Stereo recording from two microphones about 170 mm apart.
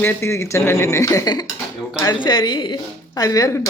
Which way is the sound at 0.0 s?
15° left (ahead or behind).